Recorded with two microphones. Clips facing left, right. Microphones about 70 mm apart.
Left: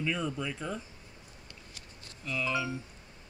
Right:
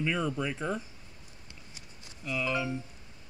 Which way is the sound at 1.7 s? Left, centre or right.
Centre.